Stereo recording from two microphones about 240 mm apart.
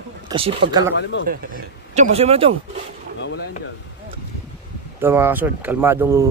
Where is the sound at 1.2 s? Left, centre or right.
Right.